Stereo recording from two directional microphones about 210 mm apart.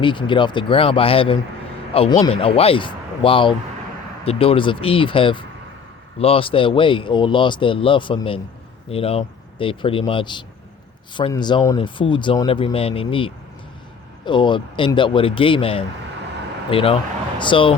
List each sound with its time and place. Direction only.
0.0 s speech: 25° left (ahead or behind)